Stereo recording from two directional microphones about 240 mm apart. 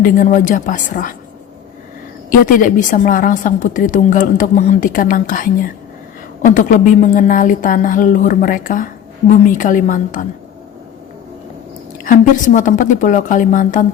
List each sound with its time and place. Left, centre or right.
0.0 s a woman's voice: left
2.3 s a woman's voice: left
12.0 s a woman's voice: left